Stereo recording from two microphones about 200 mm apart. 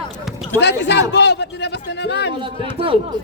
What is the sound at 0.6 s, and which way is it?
A man's voice, 60° left (ahead or behind).